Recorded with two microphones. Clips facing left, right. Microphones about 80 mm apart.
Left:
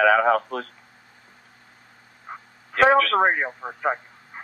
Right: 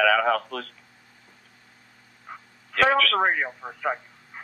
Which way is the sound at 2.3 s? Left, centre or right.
Left.